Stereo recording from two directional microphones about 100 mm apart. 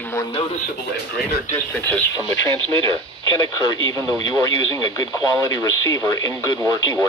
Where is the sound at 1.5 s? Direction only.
20° left (ahead or behind).